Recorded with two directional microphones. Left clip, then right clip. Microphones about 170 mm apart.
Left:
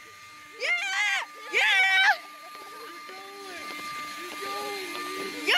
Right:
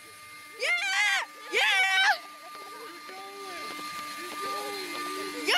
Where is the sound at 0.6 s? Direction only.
20° right (ahead or behind).